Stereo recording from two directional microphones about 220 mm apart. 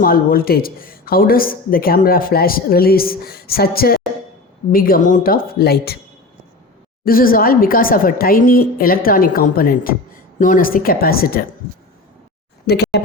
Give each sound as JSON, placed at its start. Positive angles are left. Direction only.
{"t": 0.0, "sound": "a woman's voice", "side_deg": 40}
{"t": 7.0, "sound": "speech", "side_deg": 40}
{"t": 12.6, "sound": "speech", "side_deg": 50}